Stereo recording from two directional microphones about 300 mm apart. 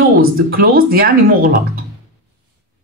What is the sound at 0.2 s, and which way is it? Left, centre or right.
Speech, right.